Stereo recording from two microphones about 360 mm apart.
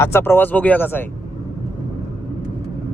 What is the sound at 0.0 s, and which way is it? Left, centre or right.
A man's voice, centre.